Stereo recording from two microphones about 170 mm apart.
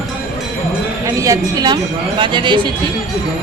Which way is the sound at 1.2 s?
20° right (ahead or behind).